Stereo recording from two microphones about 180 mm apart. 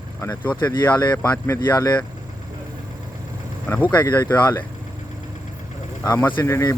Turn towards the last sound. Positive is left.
turn(degrees=15)  # may be behind; listen again after turning